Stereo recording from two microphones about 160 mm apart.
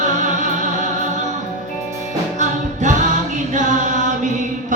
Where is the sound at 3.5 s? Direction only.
50° right (ahead or behind).